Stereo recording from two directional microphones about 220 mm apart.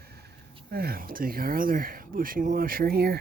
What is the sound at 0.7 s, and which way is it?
Speech, 45° right (ahead or behind).